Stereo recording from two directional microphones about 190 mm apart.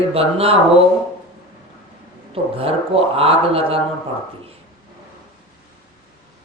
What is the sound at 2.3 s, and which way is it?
Speech, 30° right (ahead or behind).